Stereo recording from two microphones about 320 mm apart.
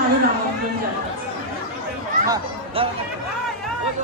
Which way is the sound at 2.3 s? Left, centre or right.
Centre.